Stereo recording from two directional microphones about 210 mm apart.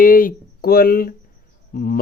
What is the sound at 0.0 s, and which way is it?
Speech, 40° left (ahead or behind).